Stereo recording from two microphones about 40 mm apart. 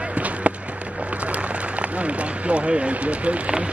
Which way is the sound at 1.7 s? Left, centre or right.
Right.